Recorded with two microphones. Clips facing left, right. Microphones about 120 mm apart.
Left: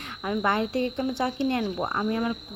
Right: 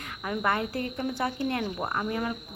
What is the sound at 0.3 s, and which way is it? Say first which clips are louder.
Speech: left 3 dB; 30° left (ahead or behind).